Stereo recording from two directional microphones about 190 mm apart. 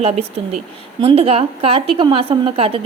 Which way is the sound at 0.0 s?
35° right (ahead or behind).